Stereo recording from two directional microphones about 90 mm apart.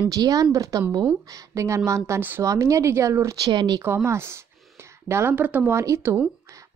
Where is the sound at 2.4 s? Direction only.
35° right (ahead or behind).